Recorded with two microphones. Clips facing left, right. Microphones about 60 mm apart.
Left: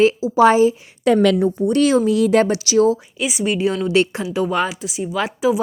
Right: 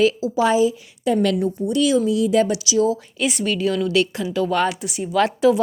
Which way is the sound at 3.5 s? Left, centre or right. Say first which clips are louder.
Left 3 dB; left.